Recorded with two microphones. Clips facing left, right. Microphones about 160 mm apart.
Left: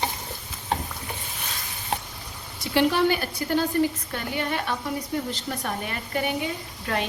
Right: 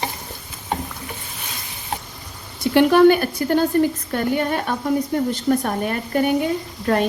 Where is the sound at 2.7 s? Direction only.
55° right (ahead or behind).